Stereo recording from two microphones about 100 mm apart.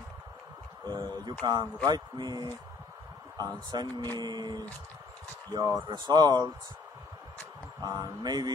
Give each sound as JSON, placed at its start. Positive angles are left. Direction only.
{"t": 0.8, "sound": "a sound", "side_deg": -45}
{"t": 1.4, "sound": "speech", "side_deg": -45}
{"t": 3.7, "sound": "speech", "side_deg": -40}
{"t": 7.8, "sound": "speech", "side_deg": -40}